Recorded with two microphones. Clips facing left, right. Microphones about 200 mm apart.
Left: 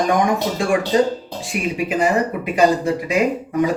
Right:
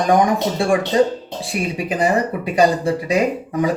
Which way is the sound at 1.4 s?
35° right (ahead or behind).